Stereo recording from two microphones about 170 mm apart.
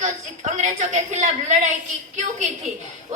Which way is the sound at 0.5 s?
40° right (ahead or behind).